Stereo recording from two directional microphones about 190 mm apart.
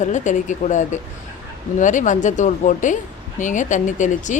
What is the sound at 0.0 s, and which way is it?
Speech, 40° left (ahead or behind).